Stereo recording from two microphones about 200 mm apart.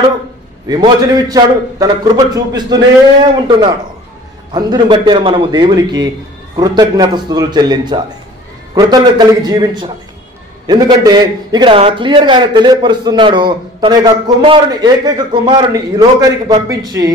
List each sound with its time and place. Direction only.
0.7 s a man's voice: 20° right (ahead or behind)
4.5 s a man's voice: 20° right (ahead or behind)